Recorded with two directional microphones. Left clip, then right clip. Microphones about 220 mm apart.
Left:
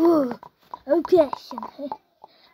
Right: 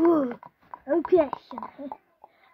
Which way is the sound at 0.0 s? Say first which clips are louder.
Left 3 dB; 20° left (ahead or behind).